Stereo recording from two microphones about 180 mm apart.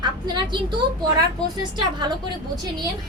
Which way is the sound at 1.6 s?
25° right (ahead or behind).